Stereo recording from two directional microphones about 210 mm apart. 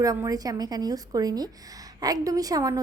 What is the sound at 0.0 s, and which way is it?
A woman's voice, 15° right (ahead or behind).